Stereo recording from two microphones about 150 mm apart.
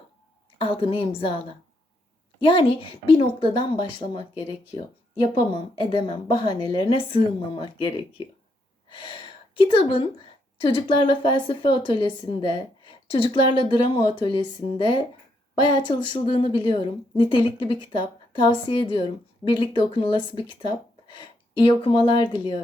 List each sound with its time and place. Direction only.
0.6 s a woman's voice: 35° left (ahead or behind)
2.4 s a woman's voice: 35° left (ahead or behind)